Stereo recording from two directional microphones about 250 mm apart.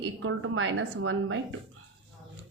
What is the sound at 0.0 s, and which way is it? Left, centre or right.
A woman's voice, right.